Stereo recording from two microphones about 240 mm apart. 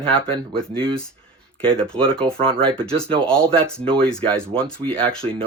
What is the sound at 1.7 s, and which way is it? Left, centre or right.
Speech, centre.